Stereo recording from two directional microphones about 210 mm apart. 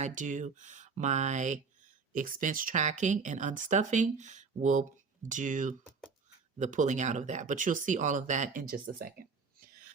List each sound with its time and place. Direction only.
0.0 s speech: 35° right (ahead or behind)